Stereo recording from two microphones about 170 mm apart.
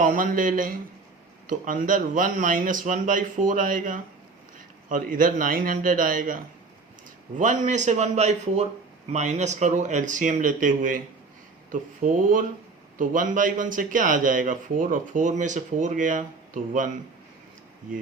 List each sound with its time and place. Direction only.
0.0 s a man's voice: 50° right (ahead or behind)